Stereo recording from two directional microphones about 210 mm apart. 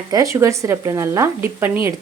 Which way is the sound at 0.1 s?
15° right (ahead or behind).